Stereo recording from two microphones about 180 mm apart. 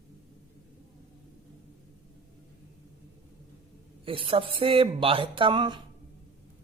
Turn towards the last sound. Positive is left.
turn(degrees=-25)  # may be behind; listen again after turning